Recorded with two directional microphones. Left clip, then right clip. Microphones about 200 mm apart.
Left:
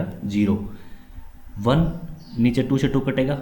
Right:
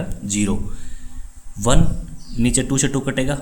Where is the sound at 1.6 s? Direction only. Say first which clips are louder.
Right 2 dB; 30° right (ahead or behind).